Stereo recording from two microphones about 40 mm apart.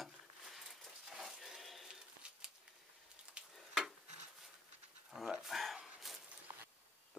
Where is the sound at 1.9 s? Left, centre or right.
Centre.